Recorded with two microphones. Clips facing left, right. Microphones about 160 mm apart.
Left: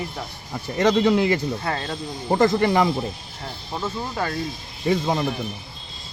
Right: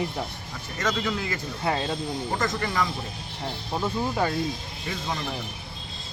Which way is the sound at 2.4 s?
35° left (ahead or behind).